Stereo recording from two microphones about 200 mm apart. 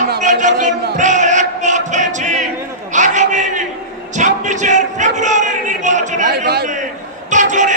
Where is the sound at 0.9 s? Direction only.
35° right (ahead or behind).